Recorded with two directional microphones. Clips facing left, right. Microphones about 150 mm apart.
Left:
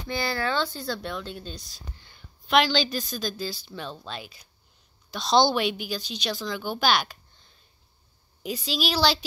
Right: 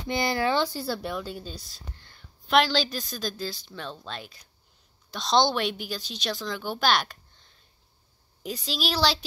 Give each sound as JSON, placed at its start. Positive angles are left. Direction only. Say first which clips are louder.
{"t": 0.1, "sound": "a woman's voice", "louder": "right 3 dB", "side_deg": -15}
{"t": 8.4, "sound": "a woman's voice", "louder": "left 2 dB", "side_deg": 0}